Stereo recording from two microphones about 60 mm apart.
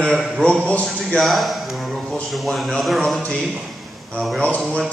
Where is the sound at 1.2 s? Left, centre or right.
Centre.